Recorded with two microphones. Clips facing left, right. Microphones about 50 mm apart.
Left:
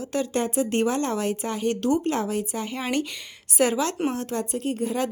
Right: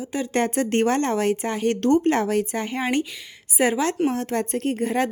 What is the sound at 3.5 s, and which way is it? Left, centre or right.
Speech, right.